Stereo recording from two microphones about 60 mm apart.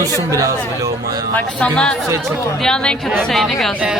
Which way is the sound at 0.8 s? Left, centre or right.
Right.